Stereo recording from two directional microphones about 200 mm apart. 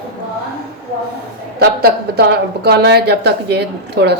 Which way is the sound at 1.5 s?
50° right (ahead or behind).